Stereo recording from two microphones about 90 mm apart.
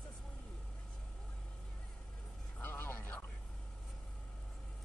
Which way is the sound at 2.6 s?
20° left (ahead or behind).